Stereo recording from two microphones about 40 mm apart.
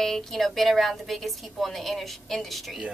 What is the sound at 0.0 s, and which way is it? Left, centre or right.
A woman's voice, centre.